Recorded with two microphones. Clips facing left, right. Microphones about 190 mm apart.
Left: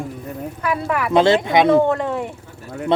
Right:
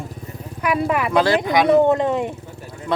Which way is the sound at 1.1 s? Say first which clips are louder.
Left 4 dB; 25° left (ahead or behind).